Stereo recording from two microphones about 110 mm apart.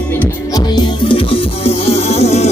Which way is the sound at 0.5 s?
40° left (ahead or behind).